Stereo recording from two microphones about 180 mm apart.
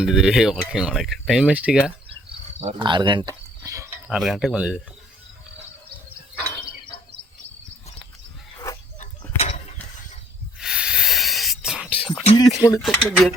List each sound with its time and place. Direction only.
0.0 s speech: centre (ahead or behind)
2.6 s speech: 25° right (ahead or behind)
4.1 s speech: 5° right (ahead or behind)
8.5 s a sound: 20° left (ahead or behind)
9.4 s mechanisms: 35° left (ahead or behind)
10.6 s a sound: 5° right (ahead or behind)
11.9 s a sound: 30° left (ahead or behind)
12.4 s speech: 20° left (ahead or behind)
12.8 s speech: centre (ahead or behind)